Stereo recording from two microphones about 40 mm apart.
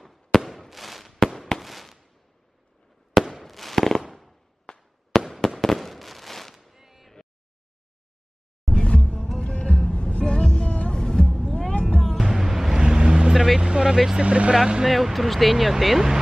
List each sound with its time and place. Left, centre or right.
0.0 s fireworks: centre
3.4 s fireworks: centre
6.5 s a sound: centre
8.6 s music: left
12.2 s music: centre
12.7 s vehicle: centre
13.3 s vehicle: centre
13.6 s vehicle: right
14.2 s vehicle: right
14.5 s speech: centre
14.9 s speech: centre